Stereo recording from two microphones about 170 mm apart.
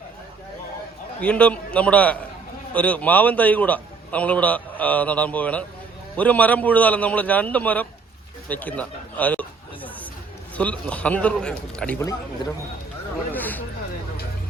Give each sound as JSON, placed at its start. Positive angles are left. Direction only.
{"t": 1.2, "sound": "a man's voice", "side_deg": 10}
{"t": 8.4, "sound": "a sound", "side_deg": 10}
{"t": 10.6, "sound": "a man's voice", "side_deg": 10}
{"t": 12.0, "sound": "a man's voice", "side_deg": 20}